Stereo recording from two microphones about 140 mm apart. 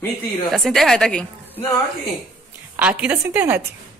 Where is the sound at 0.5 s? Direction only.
Centre (ahead or behind).